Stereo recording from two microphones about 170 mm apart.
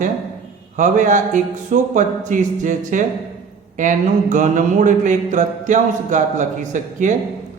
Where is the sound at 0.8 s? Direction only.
45° right (ahead or behind).